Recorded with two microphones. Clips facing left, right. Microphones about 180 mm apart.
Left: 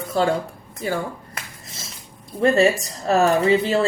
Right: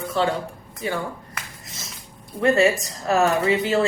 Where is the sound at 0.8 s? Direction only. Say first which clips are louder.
Left 2 dB; 35° left (ahead or behind).